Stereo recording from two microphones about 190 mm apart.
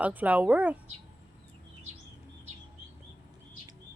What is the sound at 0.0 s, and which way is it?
Speech, 10° right (ahead or behind).